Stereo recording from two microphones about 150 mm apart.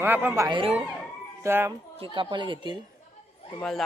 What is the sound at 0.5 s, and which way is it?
Speech, 35° right (ahead or behind).